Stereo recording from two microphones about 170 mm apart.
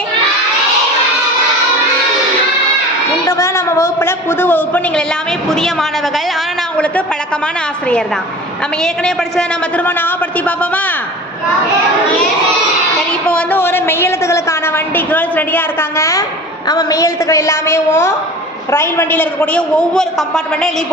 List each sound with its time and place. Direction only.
3.2 s a man's voice: 20° left (ahead or behind)
13.2 s a woman's voice: 10° left (ahead or behind)